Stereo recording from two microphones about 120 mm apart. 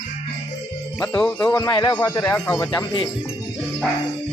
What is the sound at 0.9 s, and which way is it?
Speech, 10° left (ahead or behind).